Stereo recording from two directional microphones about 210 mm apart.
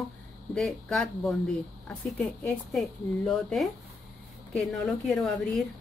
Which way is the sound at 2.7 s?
Centre (ahead or behind).